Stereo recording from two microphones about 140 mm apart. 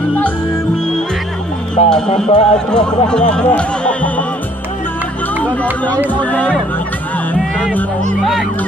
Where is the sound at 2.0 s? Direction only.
55° left (ahead or behind).